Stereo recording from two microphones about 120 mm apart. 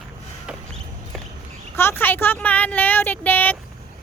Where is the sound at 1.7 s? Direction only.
20° left (ahead or behind).